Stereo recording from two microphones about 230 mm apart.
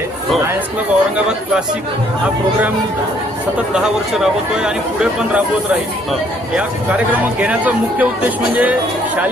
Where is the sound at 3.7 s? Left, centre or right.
Centre.